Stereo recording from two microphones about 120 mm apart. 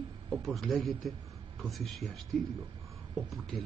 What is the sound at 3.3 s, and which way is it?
Speech, centre (ahead or behind).